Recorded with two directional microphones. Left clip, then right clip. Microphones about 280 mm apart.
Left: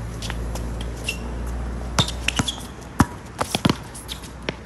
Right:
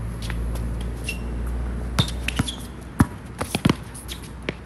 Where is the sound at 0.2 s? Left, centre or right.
Centre.